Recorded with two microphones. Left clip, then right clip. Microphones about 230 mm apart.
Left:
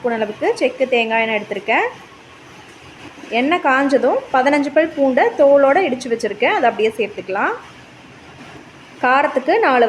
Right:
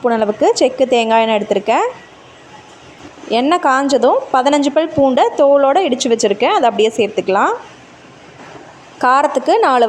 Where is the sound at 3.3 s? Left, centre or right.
Right.